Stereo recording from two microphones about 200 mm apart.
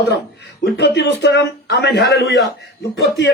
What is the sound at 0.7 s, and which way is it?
A man's voice, 60° left (ahead or behind).